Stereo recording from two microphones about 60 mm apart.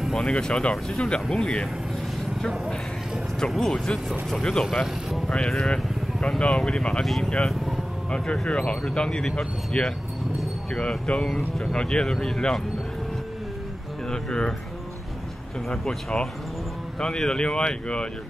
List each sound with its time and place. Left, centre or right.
0.2 s speech: centre
2.3 s speech: centre
8.1 s speech: centre
14.0 s speech: centre
15.7 s speech: centre
17.0 s speech: centre